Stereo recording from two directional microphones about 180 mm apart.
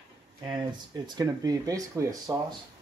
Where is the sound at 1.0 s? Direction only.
20° right (ahead or behind).